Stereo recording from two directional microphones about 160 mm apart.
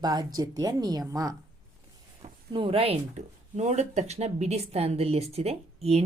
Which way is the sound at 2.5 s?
35° right (ahead or behind).